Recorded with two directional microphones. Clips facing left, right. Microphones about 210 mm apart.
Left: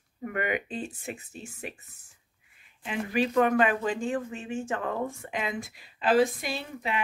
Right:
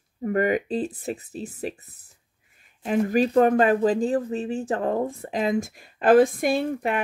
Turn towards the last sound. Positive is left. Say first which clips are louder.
# right 9 dB
turn(degrees=-50)  # may be behind; listen again after turning